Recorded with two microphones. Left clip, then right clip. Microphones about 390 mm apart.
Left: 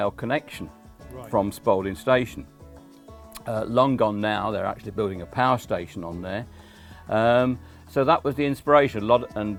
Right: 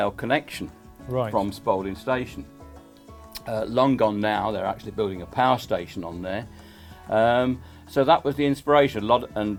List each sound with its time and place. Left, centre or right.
0.0 s speech: left
1.3 s speech: left
3.3 s speech: left